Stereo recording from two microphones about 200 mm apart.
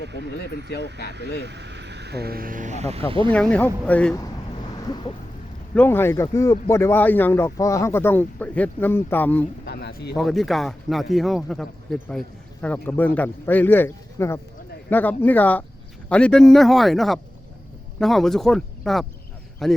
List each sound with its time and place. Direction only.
0.0 s speech: 60° right (ahead or behind)
0.3 s speech: 55° left (ahead or behind)
1.4 s speech: 60° right (ahead or behind); by 3.3 s 25° right (ahead or behind)
3.3 s speech: 5° left (ahead or behind)
5.7 s speech: 10° left (ahead or behind)
9.6 s a sound: 55° left (ahead or behind)
10.2 s a man's voice: centre (ahead or behind)